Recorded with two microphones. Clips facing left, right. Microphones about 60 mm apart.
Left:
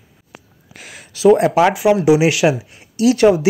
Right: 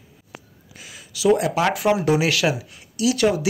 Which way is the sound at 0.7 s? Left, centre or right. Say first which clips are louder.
Left 5 dB; left.